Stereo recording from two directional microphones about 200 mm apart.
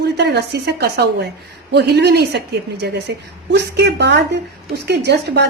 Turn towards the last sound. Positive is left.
turn(degrees=-55)  # may be behind; listen again after turning